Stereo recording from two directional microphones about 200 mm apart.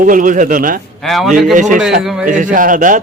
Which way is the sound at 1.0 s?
Centre (ahead or behind).